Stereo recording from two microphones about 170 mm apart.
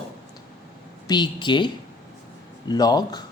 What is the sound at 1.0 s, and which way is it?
Speech, 25° left (ahead or behind).